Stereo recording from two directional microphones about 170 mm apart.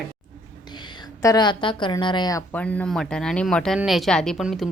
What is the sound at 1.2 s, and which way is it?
Speech, 20° left (ahead or behind).